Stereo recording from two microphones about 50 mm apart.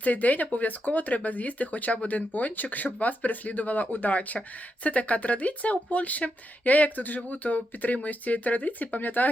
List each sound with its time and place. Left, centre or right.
0.0 s speech: left